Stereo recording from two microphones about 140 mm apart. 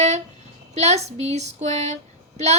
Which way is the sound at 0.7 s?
50° right (ahead or behind).